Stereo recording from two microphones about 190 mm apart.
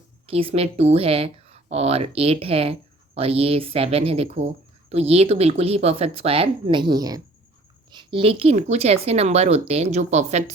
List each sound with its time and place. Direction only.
0.3 s speech: 30° right (ahead or behind)